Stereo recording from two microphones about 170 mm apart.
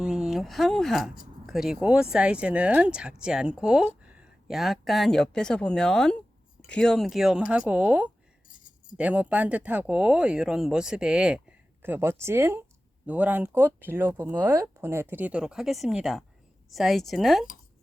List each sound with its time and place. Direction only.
0.0 s speech: 5° right (ahead or behind)
8.4 s keys jangling: 50° left (ahead or behind)
9.0 s speech: 10° right (ahead or behind)